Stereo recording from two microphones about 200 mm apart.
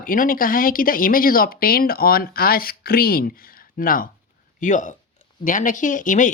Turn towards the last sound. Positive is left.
turn(degrees=40)  # may be behind; listen again after turning